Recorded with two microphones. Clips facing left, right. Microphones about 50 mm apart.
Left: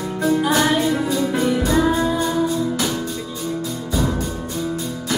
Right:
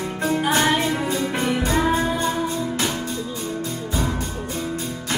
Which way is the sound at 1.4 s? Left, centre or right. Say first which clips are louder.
Left 3 dB; right.